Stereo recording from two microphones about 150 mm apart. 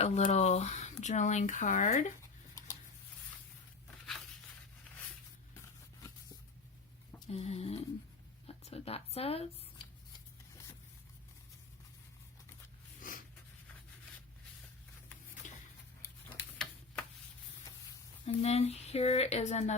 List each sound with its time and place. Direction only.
0.0 s speech: 50° left (ahead or behind)
7.3 s speech: 45° left (ahead or behind)
13.0 s snort: 65° left (ahead or behind)
15.4 s a sound: 55° left (ahead or behind)
16.6 s tick-tock: 5° left (ahead or behind)
18.3 s speech: 45° left (ahead or behind)